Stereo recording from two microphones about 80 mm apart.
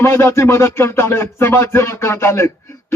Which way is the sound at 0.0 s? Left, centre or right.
Left.